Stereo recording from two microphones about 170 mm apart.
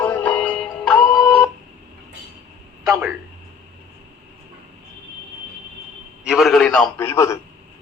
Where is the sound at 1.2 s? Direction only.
5° left (ahead or behind).